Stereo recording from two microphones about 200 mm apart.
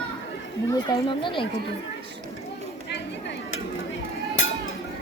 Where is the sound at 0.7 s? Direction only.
20° left (ahead or behind).